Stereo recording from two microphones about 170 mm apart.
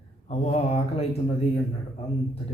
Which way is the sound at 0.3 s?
35° left (ahead or behind).